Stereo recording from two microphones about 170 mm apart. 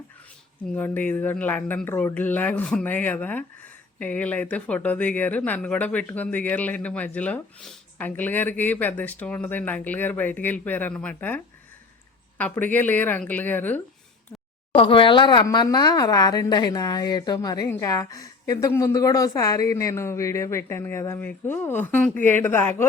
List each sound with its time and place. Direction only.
0.7 s speech: 10° left (ahead or behind)
12.4 s speech: 10° left (ahead or behind)
14.8 s speech: 30° left (ahead or behind); by 22.9 s 15° left (ahead or behind)